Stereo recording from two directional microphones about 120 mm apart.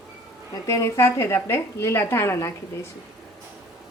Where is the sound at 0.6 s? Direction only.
25° left (ahead or behind).